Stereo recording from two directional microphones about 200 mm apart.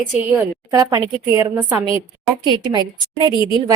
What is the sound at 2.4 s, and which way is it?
Speech, 20° right (ahead or behind).